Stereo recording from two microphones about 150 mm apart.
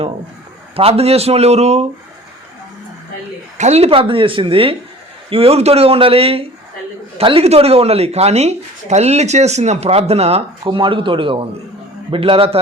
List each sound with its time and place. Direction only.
0.8 s speech: 40° right (ahead or behind)
3.6 s speech: 45° right (ahead or behind)